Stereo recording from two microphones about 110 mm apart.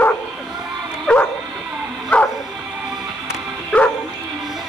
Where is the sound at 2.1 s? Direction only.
10° left (ahead or behind).